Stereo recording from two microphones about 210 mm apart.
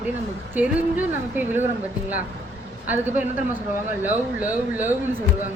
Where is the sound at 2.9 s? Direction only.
10° right (ahead or behind).